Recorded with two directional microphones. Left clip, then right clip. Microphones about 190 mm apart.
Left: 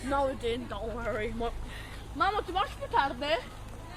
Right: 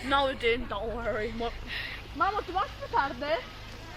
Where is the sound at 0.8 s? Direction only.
45° right (ahead or behind).